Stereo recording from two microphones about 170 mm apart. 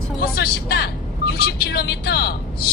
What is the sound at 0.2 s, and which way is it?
Speech, 70° left (ahead or behind).